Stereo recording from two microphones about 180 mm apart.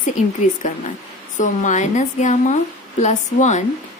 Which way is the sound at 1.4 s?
45° left (ahead or behind).